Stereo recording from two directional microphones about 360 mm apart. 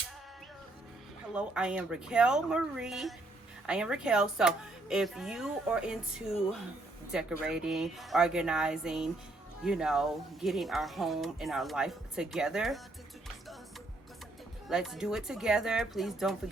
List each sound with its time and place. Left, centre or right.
1.3 s speech: centre
14.7 s speech: centre